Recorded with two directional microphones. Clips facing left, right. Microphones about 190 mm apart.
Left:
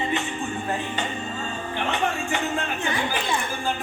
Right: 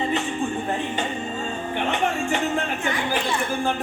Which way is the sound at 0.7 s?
25° right (ahead or behind).